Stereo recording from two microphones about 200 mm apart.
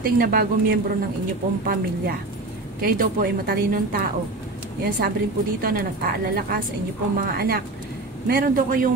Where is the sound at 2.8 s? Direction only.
45° right (ahead or behind).